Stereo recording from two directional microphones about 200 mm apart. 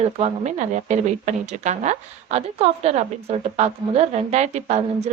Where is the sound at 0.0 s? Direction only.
35° right (ahead or behind).